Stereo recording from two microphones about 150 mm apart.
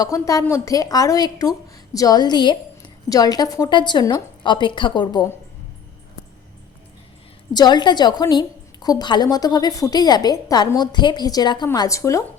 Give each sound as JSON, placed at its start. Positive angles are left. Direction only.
{"t": 0.0, "sound": "a woman's voice", "side_deg": 25}
{"t": 7.5, "sound": "a woman's voice", "side_deg": 30}